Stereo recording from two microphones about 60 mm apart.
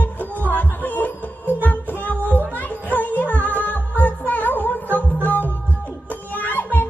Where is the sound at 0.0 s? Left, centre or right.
Left.